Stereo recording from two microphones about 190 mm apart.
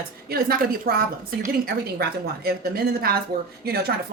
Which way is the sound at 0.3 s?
50° right (ahead or behind).